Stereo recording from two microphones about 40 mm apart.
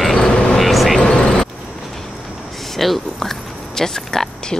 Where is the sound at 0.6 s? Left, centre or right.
Centre.